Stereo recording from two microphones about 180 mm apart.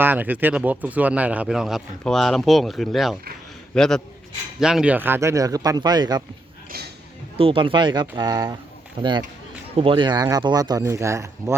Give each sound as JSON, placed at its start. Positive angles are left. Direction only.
{"t": 0.0, "sound": "speech", "side_deg": -10}
{"t": 6.7, "sound": "a sound", "side_deg": -60}
{"t": 7.3, "sound": "speech", "side_deg": -30}